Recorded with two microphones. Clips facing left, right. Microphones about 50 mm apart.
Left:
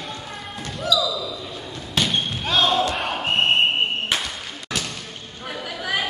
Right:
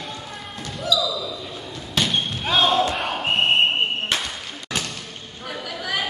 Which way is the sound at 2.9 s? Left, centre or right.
Centre.